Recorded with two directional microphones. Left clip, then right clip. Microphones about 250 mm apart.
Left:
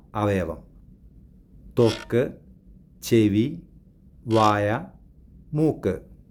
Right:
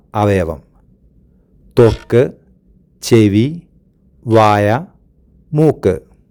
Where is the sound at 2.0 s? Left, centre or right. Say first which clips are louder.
Right 11 dB; right.